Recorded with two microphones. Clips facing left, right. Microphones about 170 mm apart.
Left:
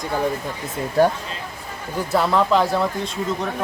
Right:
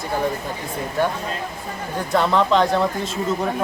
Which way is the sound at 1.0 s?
40° left (ahead or behind).